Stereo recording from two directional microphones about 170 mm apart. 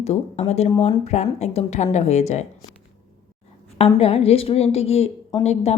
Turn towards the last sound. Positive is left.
turn(degrees=35)  # may be behind; listen again after turning